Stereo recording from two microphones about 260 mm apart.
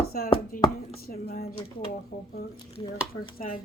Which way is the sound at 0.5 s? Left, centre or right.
Left.